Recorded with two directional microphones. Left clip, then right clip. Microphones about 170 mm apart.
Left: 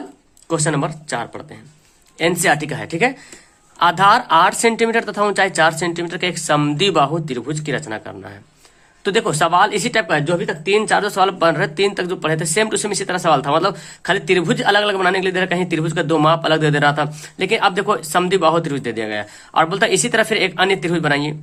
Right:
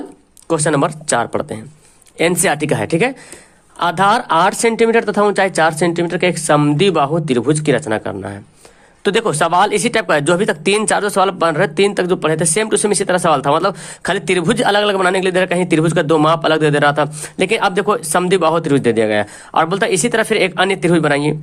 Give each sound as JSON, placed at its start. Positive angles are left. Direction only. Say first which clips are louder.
{"t": 0.4, "sound": "speech", "louder": "right 5 dB", "side_deg": -35}
{"t": 2.1, "sound": "speech", "louder": "right 1 dB", "side_deg": -30}
{"t": 7.3, "sound": "speech", "louder": "right 9 dB", "side_deg": -35}